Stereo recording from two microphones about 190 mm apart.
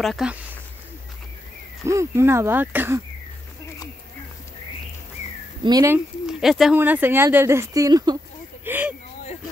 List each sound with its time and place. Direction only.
0.0 s speech: centre (ahead or behind)
1.9 s speech: 15° right (ahead or behind)
5.6 s speech: 20° right (ahead or behind)
6.2 s speech: centre (ahead or behind); by 8.2 s 20° right (ahead or behind)
8.6 s a sound: 10° right (ahead or behind)